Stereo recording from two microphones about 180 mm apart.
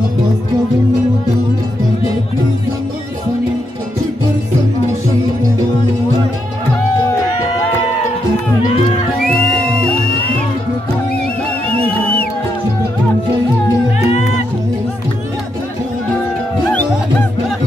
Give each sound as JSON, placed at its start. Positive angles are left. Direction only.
{"t": 14.0, "sound": "music", "side_deg": 40}